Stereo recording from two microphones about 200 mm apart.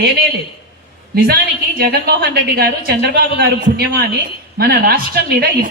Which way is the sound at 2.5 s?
55° right (ahead or behind).